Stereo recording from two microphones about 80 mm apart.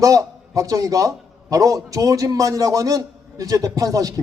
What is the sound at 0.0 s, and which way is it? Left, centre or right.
A man's voice, right.